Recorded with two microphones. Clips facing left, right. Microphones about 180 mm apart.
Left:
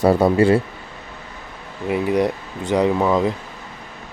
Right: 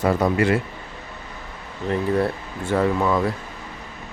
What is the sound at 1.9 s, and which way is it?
Speech, 15° left (ahead or behind).